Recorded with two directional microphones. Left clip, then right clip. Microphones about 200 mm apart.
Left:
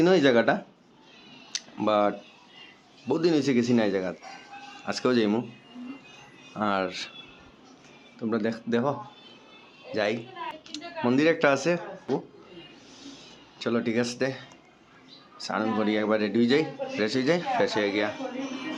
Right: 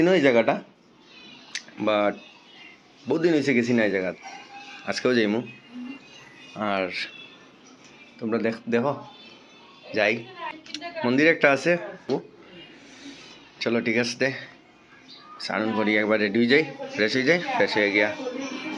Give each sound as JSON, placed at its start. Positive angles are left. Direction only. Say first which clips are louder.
{"t": 0.0, "sound": "a man's voice", "louder": "right 2 dB", "side_deg": 15}
{"t": 1.5, "sound": "a sound", "louder": "right 1 dB", "side_deg": 15}
{"t": 3.1, "sound": "a man's voice", "louder": "right 2 dB", "side_deg": 10}
{"t": 6.5, "sound": "a man's voice", "louder": "right 1 dB", "side_deg": 10}
{"t": 8.2, "sound": "a man's voice", "louder": "right 3 dB", "side_deg": 10}
{"t": 13.6, "sound": "a man's voice", "louder": "right 3 dB", "side_deg": 5}